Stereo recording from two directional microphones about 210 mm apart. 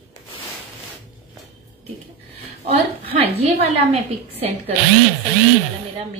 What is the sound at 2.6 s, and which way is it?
A woman's voice, 25° right (ahead or behind).